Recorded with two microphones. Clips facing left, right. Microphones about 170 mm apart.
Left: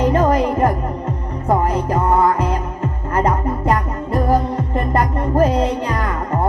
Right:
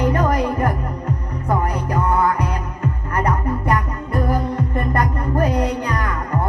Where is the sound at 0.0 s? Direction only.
25° left (ahead or behind).